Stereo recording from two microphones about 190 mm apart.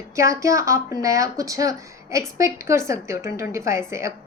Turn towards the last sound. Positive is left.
turn(degrees=-15)  # may be behind; listen again after turning